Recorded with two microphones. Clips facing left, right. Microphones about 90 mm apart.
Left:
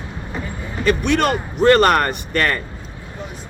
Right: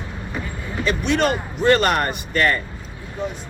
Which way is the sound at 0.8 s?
55° left (ahead or behind).